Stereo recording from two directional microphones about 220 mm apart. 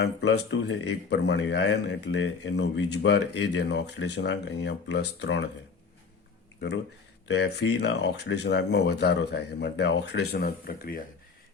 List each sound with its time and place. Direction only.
0.0 s speech: 50° left (ahead or behind)
7.3 s speech: 50° left (ahead or behind)